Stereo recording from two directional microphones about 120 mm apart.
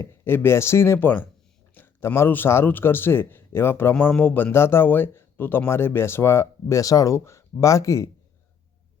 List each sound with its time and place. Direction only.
0.0 s a man's voice: 20° left (ahead or behind)
3.9 s speech: 10° left (ahead or behind)